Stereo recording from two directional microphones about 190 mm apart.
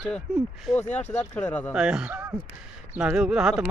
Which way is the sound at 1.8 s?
5° right (ahead or behind).